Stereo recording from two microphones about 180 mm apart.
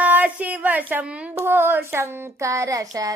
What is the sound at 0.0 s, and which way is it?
A woman's voice, 10° right (ahead or behind).